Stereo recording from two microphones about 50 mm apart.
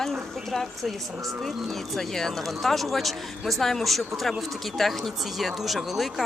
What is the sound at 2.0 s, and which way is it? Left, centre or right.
Speech, centre.